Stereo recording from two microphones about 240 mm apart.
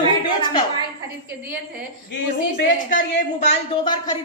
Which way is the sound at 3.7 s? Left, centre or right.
Left.